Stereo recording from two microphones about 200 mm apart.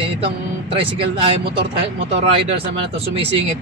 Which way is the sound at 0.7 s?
25° right (ahead or behind).